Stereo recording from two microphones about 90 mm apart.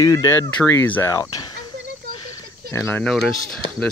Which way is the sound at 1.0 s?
40° left (ahead or behind).